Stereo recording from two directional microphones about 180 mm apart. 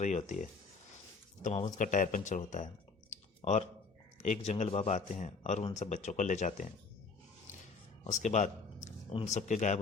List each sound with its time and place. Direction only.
0.0 s a man's voice: 40° left (ahead or behind)
3.1 s clicking: 40° left (ahead or behind)
4.2 s a man's voice: 40° left (ahead or behind)
8.0 s a sound: 40° left (ahead or behind)
9.1 s a man's voice: 40° left (ahead or behind)